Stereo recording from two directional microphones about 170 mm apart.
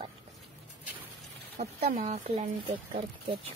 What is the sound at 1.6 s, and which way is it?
Speech, 45° right (ahead or behind).